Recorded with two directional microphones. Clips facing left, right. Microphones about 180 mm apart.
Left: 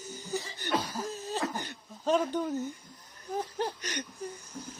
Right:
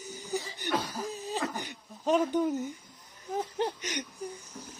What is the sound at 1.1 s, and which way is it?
Throat clearing, centre (ahead or behind).